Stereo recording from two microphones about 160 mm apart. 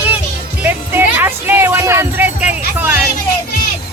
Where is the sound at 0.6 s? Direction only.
15° right (ahead or behind).